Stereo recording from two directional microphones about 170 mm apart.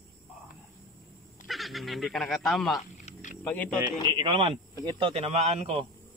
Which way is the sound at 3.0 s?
50° left (ahead or behind).